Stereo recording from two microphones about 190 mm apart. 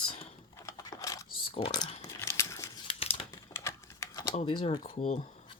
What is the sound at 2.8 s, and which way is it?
Crumpling, 30° left (ahead or behind).